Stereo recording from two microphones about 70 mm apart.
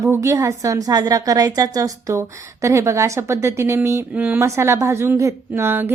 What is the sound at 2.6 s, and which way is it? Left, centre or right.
A woman's voice, right.